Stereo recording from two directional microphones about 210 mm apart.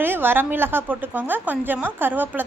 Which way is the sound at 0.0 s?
10° right (ahead or behind).